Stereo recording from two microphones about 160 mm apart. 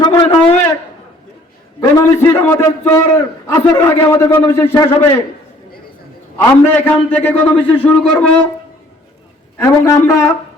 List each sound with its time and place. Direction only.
0.0 s a sound: 25° left (ahead or behind)
1.8 s a man's voice: 20° left (ahead or behind)
6.3 s a man's voice: 10° left (ahead or behind)
9.8 s a man's voice: 20° left (ahead or behind)